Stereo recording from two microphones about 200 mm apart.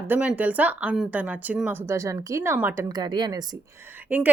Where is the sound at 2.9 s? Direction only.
20° right (ahead or behind).